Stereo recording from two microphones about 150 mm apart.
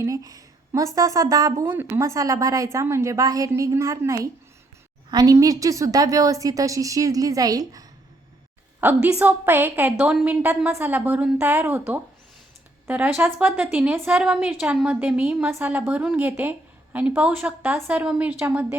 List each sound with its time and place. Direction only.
0.0 s a woman's voice: 20° right (ahead or behind)
8.8 s a woman's voice: 10° right (ahead or behind)